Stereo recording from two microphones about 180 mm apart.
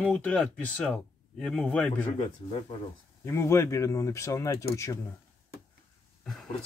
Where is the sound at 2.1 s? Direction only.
30° left (ahead or behind).